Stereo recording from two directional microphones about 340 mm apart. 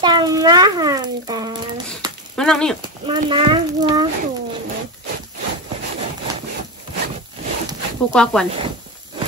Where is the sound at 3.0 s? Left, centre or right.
Centre.